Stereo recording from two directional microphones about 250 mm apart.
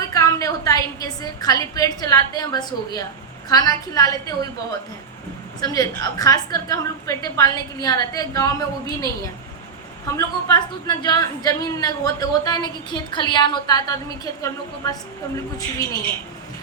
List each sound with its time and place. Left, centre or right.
0.0 s a woman's voice: centre
5.5 s a woman's voice: centre
10.2 s a woman's voice: centre